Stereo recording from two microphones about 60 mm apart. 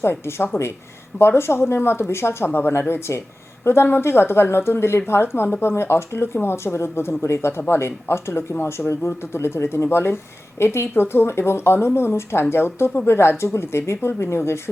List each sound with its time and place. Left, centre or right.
0.0 s speech: left